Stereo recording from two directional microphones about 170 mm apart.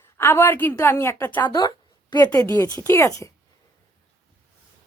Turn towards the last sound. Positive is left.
turn(degrees=15)  # may be behind; listen again after turning